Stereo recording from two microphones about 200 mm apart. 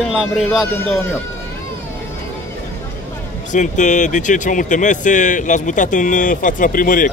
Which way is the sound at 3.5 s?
40° left (ahead or behind).